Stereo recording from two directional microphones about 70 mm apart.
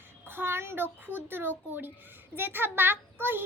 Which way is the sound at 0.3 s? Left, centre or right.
Right.